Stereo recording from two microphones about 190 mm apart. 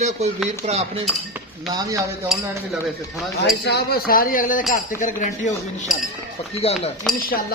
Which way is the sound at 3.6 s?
60° left (ahead or behind).